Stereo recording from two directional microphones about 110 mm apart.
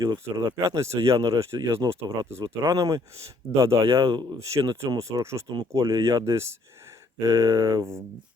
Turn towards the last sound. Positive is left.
turn(degrees=-35)  # may be behind; listen again after turning